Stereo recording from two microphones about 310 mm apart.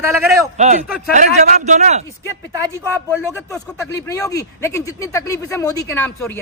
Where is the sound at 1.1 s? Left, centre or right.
Right.